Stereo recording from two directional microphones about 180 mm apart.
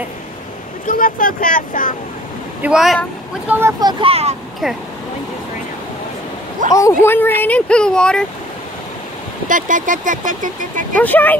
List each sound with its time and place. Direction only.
0.8 s speech: 50° left (ahead or behind)
2.6 s speech: 5° right (ahead or behind)
3.8 s speech: 30° right (ahead or behind)
6.7 s speech: 15° left (ahead or behind)
9.5 s speech: 45° right (ahead or behind)
11.0 s speech: 10° left (ahead or behind)